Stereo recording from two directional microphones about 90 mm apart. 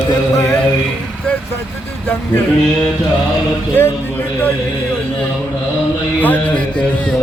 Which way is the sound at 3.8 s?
20° left (ahead or behind).